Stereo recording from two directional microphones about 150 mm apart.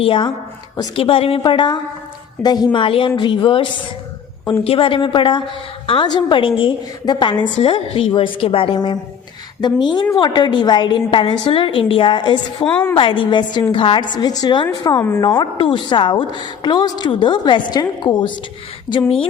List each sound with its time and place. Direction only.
0.0 s a woman's voice: 35° left (ahead or behind)
12.6 s a woman's voice: 10° left (ahead or behind)
13.0 s a woman's voice: 30° left (ahead or behind)